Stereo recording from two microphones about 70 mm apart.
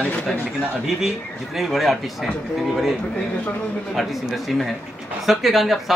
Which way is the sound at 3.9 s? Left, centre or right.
Centre.